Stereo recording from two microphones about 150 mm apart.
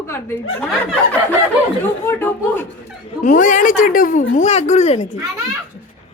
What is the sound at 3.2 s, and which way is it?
Speech, 60° left (ahead or behind).